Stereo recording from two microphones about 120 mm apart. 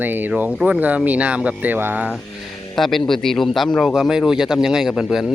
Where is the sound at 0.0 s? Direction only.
15° right (ahead or behind).